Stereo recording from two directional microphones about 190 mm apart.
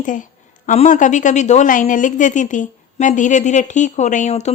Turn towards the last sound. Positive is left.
turn(degrees=35)  # may be behind; listen again after turning